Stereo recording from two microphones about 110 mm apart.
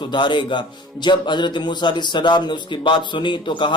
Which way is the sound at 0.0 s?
45° left (ahead or behind).